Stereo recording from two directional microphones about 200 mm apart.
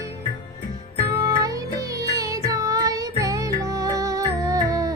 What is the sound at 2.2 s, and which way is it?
Music, 15° right (ahead or behind).